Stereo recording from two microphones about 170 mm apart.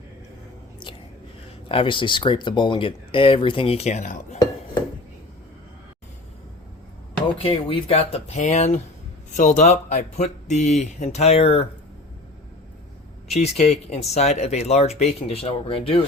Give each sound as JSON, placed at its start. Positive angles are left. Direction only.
{"t": 1.6, "sound": "speech", "side_deg": 30}
{"t": 7.4, "sound": "speech", "side_deg": 35}
{"t": 13.4, "sound": "speech", "side_deg": 40}